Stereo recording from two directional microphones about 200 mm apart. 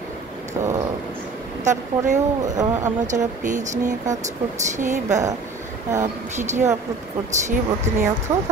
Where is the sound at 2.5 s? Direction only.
15° right (ahead or behind).